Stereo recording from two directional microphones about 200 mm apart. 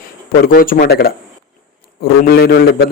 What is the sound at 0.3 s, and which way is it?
Speech, 45° left (ahead or behind).